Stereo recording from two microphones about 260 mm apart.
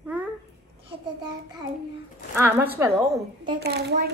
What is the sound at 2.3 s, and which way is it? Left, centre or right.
Speech, centre.